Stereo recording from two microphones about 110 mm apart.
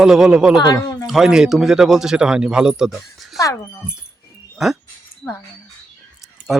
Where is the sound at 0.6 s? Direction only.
30° left (ahead or behind).